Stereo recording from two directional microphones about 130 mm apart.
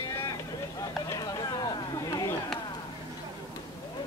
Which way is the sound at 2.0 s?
30° left (ahead or behind).